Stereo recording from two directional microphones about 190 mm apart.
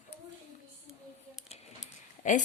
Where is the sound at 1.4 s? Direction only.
35° left (ahead or behind).